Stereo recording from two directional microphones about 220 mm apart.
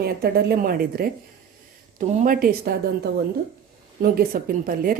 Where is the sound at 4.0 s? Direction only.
40° right (ahead or behind).